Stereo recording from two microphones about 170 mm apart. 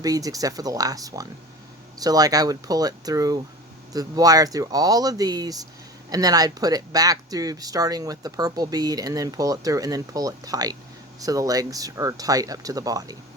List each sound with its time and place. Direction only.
0.0 s speech: 20° right (ahead or behind)